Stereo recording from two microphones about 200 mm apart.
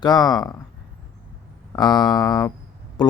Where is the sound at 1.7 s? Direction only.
20° left (ahead or behind).